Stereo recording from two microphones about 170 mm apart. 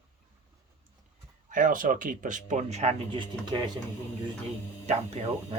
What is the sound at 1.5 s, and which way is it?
Speech, 55° right (ahead or behind).